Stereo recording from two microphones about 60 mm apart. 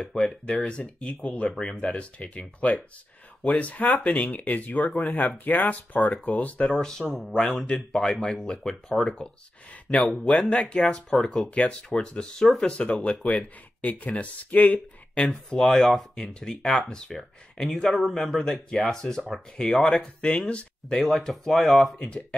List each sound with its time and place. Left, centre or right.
0.0 s speech: centre
6.7 s speech: centre
10.8 s speech: centre
11.5 s speech: centre
15.2 s speech: centre
21.0 s speech: centre
21.9 s speech: centre